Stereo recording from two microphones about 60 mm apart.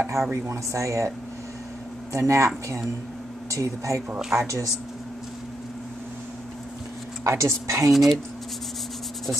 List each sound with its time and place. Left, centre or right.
0.2 s speech: right
2.1 s speech: right
7.2 s speech: right
7.9 s speech: centre